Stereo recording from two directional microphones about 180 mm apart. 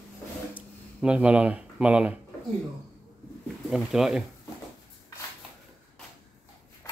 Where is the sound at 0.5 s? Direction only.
5° right (ahead or behind).